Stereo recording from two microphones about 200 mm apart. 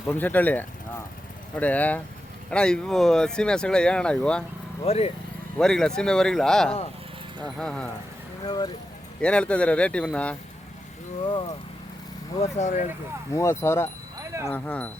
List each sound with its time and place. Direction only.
0.1 s speech: 10° left (ahead or behind)
4.9 s speech: 30° left (ahead or behind)
5.5 s speech: 5° left (ahead or behind)
8.4 s speech: 20° left (ahead or behind)
9.2 s speech: 5° left (ahead or behind)
12.4 s speech: 35° left (ahead or behind)
13.3 s speech: 15° left (ahead or behind)
14.2 s a sound: 15° right (ahead or behind)
14.5 s speech: 5° left (ahead or behind)